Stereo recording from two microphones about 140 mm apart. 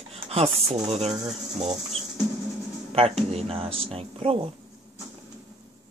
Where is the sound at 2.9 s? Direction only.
45° right (ahead or behind).